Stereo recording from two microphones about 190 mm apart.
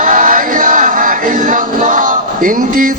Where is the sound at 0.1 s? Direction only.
45° right (ahead or behind).